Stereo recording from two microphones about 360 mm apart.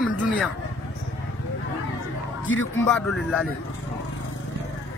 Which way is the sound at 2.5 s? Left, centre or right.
Left.